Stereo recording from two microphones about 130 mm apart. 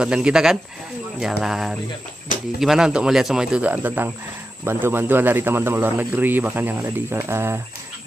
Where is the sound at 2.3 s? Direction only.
90° left.